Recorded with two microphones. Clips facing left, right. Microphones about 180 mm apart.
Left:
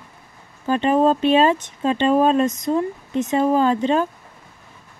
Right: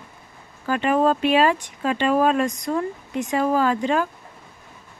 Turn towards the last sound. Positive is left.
turn(degrees=25)  # may be behind; listen again after turning